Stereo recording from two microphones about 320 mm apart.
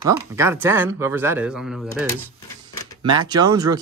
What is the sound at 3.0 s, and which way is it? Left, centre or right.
Speech, centre.